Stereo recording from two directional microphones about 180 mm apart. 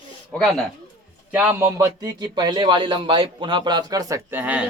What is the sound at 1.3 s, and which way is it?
A man's voice, 10° right (ahead or behind).